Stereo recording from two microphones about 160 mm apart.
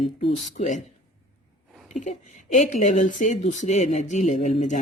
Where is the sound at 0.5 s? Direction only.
50° left (ahead or behind).